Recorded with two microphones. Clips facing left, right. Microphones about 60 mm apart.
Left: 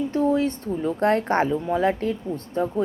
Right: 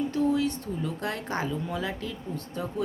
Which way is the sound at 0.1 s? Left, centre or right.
Left.